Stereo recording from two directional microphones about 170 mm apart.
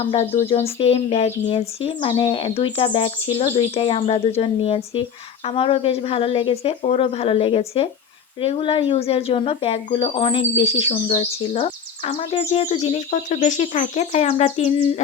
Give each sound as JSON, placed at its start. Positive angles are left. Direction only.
{"t": 0.0, "sound": "speech", "side_deg": 35}